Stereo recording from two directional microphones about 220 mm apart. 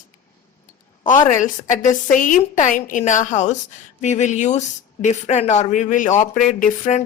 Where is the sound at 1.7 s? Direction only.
35° left (ahead or behind).